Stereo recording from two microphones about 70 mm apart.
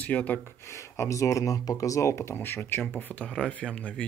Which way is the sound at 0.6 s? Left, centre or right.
Left.